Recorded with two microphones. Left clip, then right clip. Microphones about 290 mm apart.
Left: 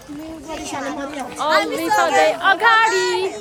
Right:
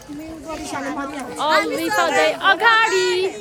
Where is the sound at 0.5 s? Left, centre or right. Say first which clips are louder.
Even; centre.